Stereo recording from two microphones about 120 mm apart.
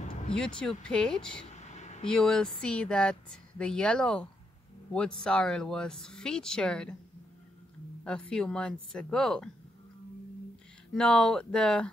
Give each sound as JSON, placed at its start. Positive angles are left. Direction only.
{"t": 0.3, "sound": "speech", "side_deg": 5}
{"t": 1.6, "sound": "a sound", "side_deg": 70}
{"t": 2.0, "sound": "speech", "side_deg": 5}
{"t": 8.0, "sound": "speech", "side_deg": 10}
{"t": 10.9, "sound": "speech", "side_deg": 5}